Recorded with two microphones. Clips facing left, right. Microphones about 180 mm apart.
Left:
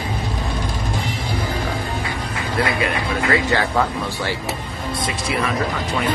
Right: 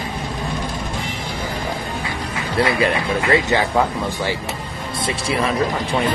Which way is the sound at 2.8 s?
25° right (ahead or behind).